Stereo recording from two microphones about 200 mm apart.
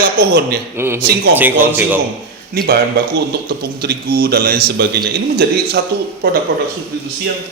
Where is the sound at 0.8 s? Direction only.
10° right (ahead or behind).